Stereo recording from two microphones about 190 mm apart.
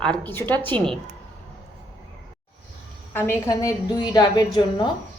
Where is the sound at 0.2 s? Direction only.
10° left (ahead or behind).